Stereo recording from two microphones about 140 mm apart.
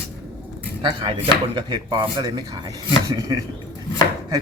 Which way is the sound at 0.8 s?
30° right (ahead or behind).